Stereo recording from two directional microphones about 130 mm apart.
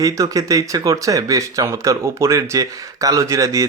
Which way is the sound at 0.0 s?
25° right (ahead or behind).